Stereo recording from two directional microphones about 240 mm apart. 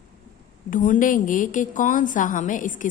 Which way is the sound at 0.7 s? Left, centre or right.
Left.